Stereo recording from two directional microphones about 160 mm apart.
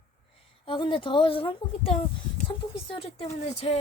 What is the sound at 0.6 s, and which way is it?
A woman's voice, 30° left (ahead or behind).